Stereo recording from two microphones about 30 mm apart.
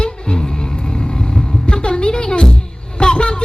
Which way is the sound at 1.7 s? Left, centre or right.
Left.